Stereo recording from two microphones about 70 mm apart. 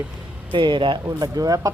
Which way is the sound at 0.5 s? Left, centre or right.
Right.